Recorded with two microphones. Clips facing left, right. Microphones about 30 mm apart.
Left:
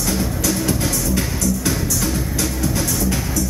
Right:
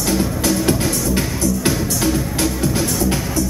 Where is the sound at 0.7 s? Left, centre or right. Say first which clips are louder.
Right 3 dB; right.